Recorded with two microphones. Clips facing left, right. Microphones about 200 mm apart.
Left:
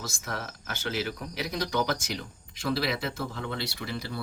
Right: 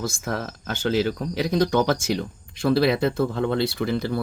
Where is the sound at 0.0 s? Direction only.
55° right (ahead or behind).